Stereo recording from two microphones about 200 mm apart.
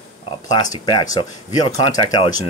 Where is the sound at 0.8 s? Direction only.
20° left (ahead or behind).